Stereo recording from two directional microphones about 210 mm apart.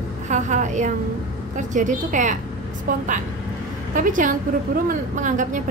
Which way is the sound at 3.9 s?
40° right (ahead or behind).